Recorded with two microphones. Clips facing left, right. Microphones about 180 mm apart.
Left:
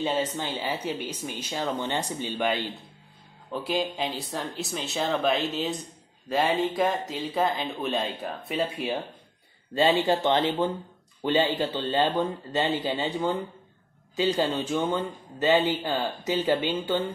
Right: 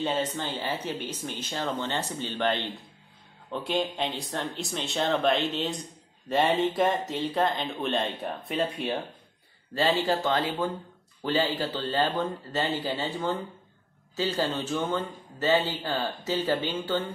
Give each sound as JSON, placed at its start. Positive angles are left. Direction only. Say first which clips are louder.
{"t": 0.0, "sound": "a man's voice", "louder": "left 1 dB", "side_deg": 10}
{"t": 9.8, "sound": "a man's voice", "louder": "left 3 dB", "side_deg": 20}